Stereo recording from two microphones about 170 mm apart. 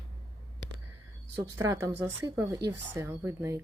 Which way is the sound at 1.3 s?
15° right (ahead or behind).